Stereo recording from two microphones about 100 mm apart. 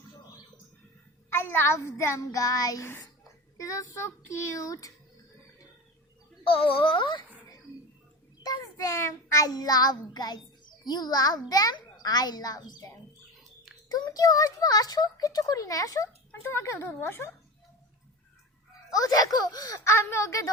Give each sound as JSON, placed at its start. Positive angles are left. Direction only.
{"t": 1.3, "sound": "child singing", "side_deg": 20}
{"t": 3.6, "sound": "a child's voice", "side_deg": 30}
{"t": 6.4, "sound": "a sound", "side_deg": 60}
{"t": 9.0, "sound": "a child's voice", "side_deg": 30}
{"t": 13.9, "sound": "a child's voice", "side_deg": 40}
{"t": 16.4, "sound": "child singing", "side_deg": 25}
{"t": 18.9, "sound": "a child's voice", "side_deg": 40}
{"t": 19.9, "sound": "child singing", "side_deg": 30}